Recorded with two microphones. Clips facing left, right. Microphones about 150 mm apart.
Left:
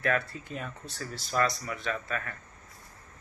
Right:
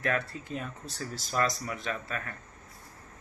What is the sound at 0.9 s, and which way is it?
Speech, 40° right (ahead or behind).